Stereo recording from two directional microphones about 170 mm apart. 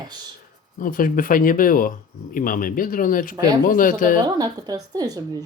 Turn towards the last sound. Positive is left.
turn(degrees=-25)  # may be behind; listen again after turning